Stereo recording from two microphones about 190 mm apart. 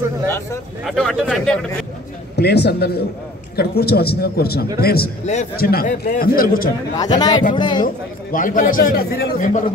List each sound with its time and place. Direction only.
0.8 s speech: centre (ahead or behind)
2.3 s a man's voice: 60° left (ahead or behind)
5.2 s a man's voice: 40° left (ahead or behind)
5.6 s a man's voice: 50° left (ahead or behind)
7.0 s speech: 20° left (ahead or behind)
7.8 s a man's voice: 45° left (ahead or behind)